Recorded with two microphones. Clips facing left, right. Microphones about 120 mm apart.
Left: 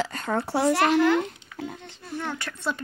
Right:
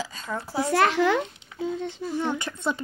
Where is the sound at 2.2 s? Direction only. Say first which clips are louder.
Right 3 dB; 20° right (ahead or behind).